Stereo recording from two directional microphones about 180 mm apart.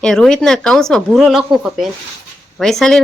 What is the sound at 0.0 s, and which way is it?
Speech, 5° left (ahead or behind).